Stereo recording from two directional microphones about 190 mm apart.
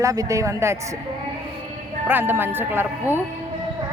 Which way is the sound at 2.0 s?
10° right (ahead or behind).